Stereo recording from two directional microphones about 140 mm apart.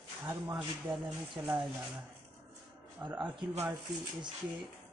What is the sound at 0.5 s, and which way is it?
Speech, centre (ahead or behind).